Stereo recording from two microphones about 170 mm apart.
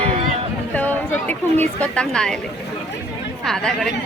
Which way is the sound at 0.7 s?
10° left (ahead or behind).